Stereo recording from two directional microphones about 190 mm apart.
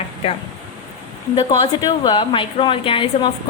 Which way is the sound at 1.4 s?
30° left (ahead or behind).